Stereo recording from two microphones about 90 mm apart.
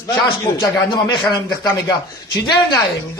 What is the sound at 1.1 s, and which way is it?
Speech, 50° left (ahead or behind).